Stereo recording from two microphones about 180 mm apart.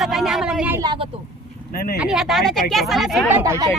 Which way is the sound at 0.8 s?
25° right (ahead or behind).